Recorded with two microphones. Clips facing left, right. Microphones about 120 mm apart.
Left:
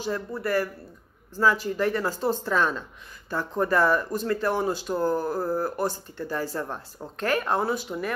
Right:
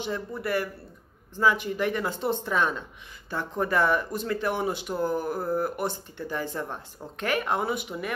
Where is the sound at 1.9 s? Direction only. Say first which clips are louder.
Left 2 dB; 20° right (ahead or behind).